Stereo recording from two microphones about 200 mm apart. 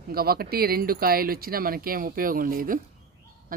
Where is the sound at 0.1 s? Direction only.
50° right (ahead or behind).